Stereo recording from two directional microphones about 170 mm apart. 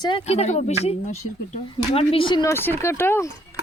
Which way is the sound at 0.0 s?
30° left (ahead or behind).